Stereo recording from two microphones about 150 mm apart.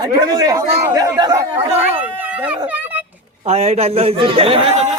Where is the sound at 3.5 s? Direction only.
45° right (ahead or behind).